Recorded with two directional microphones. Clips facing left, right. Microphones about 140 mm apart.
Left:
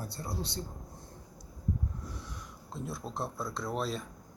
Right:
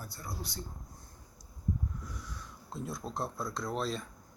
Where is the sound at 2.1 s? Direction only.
25° left (ahead or behind).